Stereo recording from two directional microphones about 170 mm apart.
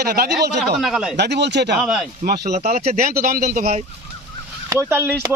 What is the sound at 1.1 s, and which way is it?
Speech, 85° right.